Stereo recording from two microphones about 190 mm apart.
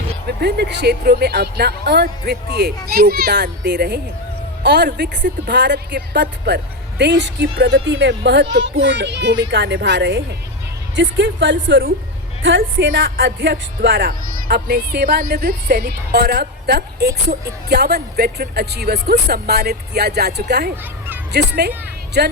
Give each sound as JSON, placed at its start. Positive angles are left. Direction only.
{"t": 0.3, "sound": "speech", "side_deg": -60}
{"t": 13.2, "sound": "speech", "side_deg": -65}